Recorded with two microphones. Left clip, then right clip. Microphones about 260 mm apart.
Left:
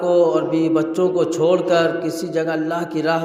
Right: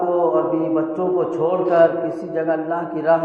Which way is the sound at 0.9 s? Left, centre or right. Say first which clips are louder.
Left 2 dB; left.